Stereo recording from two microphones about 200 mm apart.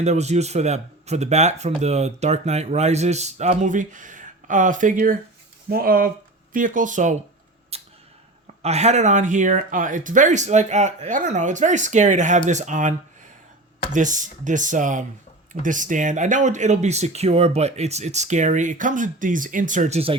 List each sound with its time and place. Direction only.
0.0 s speech: 35° right (ahead or behind)
7.7 s a sound: 30° right (ahead or behind)
8.6 s speech: 35° right (ahead or behind)
13.9 s speech: 40° right (ahead or behind)